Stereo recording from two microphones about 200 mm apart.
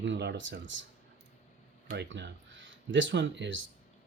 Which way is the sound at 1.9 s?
60° right (ahead or behind).